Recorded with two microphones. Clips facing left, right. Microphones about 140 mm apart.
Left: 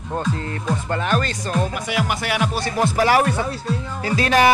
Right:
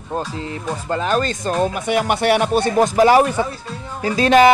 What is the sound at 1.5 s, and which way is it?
Speech, 35° right (ahead or behind).